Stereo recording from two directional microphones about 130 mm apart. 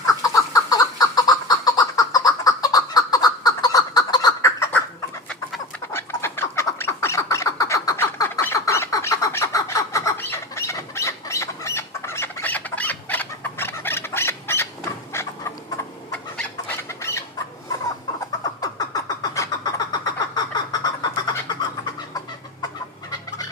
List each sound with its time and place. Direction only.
0.0 s a sound: 25° left (ahead or behind)
5.9 s bird: 20° left (ahead or behind)
15.1 s a sound: 20° left (ahead or behind)
16.1 s chicken: 10° left (ahead or behind)
17.0 s bird: 20° left (ahead or behind)
18.6 s vehicle: 30° left (ahead or behind)